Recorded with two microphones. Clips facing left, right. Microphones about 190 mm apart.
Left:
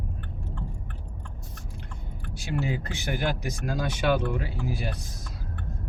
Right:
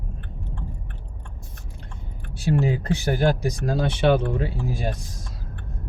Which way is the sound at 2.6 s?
35° right (ahead or behind).